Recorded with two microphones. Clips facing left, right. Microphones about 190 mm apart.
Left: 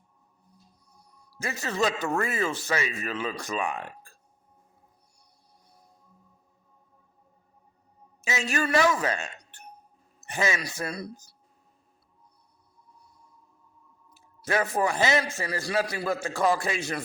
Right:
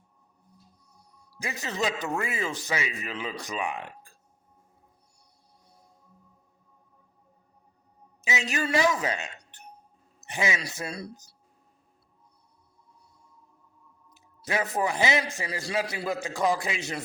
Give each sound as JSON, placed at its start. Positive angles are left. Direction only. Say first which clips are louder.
{"t": 1.2, "sound": "a man's voice", "louder": "left 2 dB", "side_deg": -15}
{"t": 8.2, "sound": "a man's voice", "louder": "left 2 dB", "side_deg": -15}
{"t": 14.1, "sound": "a man's voice", "louder": "left 3 dB", "side_deg": -15}